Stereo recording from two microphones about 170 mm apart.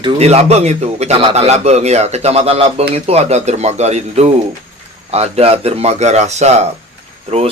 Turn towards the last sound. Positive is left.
turn(degrees=-35)  # may be behind; listen again after turning